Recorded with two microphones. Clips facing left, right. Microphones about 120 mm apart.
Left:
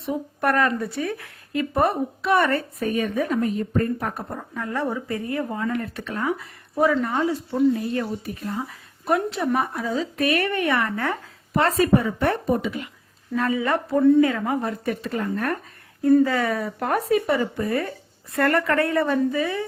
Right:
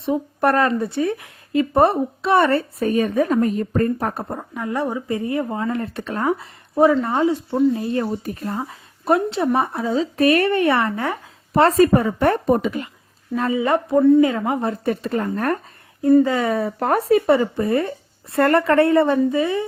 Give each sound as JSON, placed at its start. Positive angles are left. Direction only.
{"t": 0.0, "sound": "a woman's voice", "side_deg": -30}
{"t": 4.2, "sound": "speech", "side_deg": -20}
{"t": 6.3, "sound": "speech", "side_deg": -25}
{"t": 8.2, "sound": "speech", "side_deg": -45}
{"t": 8.7, "sound": "a woman's voice", "side_deg": -25}
{"t": 10.9, "sound": "speech", "side_deg": -15}
{"t": 11.5, "sound": "a woman's voice", "side_deg": -35}
{"t": 13.3, "sound": "speech", "side_deg": -20}
{"t": 16.2, "sound": "speech", "side_deg": -20}